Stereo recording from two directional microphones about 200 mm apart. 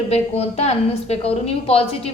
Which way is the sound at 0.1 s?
30° left (ahead or behind).